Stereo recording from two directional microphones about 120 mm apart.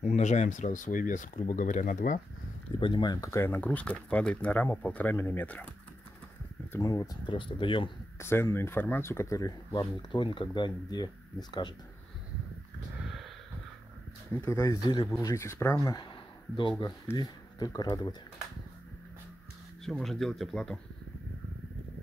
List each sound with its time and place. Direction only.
0.0 s speech: 75° left (ahead or behind)
2.8 s speech: 40° left (ahead or behind)
3.3 s speech: 20° left (ahead or behind)
6.8 s speech: 30° left (ahead or behind)
7.2 s speech: 45° left (ahead or behind)
8.2 s speech: 20° left (ahead or behind)
9.7 s speech: 40° left (ahead or behind)
14.3 s speech: 25° left (ahead or behind)
19.8 s speech: centre (ahead or behind)